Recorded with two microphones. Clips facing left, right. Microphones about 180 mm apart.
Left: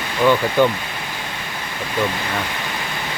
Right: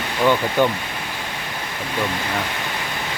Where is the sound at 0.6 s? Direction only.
15° right (ahead or behind).